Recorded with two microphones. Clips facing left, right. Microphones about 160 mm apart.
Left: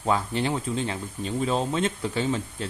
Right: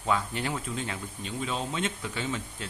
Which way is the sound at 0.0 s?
30° left (ahead or behind).